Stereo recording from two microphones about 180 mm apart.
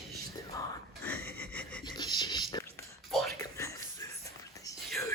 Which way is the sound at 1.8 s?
25° left (ahead or behind).